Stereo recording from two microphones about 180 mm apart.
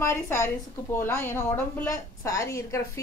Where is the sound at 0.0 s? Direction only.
15° left (ahead or behind).